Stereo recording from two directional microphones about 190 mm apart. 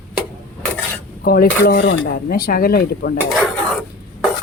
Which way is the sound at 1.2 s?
55° left (ahead or behind).